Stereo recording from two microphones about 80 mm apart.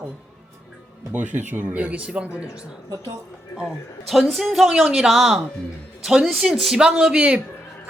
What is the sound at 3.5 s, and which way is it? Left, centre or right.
A woman's voice, centre.